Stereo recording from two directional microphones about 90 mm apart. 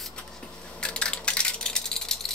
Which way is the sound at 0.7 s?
10° left (ahead or behind).